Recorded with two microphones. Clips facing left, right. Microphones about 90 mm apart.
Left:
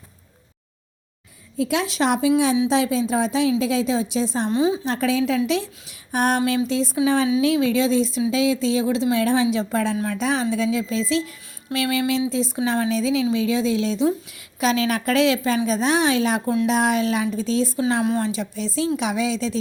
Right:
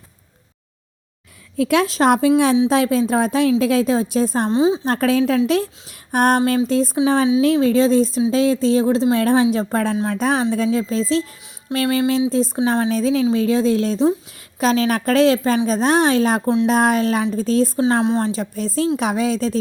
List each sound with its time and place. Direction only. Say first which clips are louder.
1.5 s speech: right 5 dB; 55° right (ahead or behind)
4.4 s speech: right 4 dB; 30° right (ahead or behind)
4.9 s speech: right 4 dB; 50° right (ahead or behind)
9.9 s speech: right 3 dB; 30° right (ahead or behind)
10.2 s speech: right 4 dB; 45° right (ahead or behind)
18.3 s speech: right 3 dB; 40° right (ahead or behind)